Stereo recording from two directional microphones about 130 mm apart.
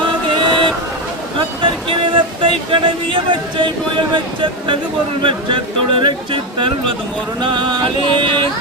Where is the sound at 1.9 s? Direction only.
40° right (ahead or behind).